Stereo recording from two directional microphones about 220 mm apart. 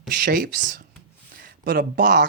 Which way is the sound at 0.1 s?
45° right (ahead or behind).